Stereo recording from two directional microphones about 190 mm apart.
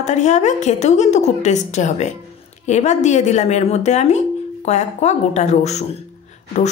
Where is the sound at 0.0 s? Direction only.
40° left (ahead or behind).